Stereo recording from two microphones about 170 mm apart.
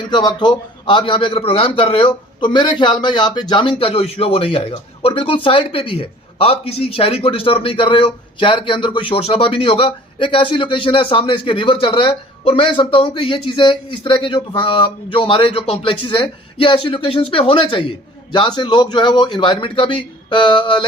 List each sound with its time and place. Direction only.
0.1 s a man's voice: 25° left (ahead or behind)